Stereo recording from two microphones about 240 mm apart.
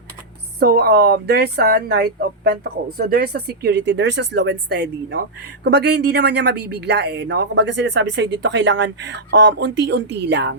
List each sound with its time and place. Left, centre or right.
0.6 s speech: right